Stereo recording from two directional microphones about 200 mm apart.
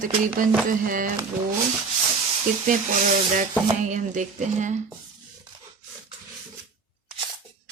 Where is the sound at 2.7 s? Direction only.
40° right (ahead or behind).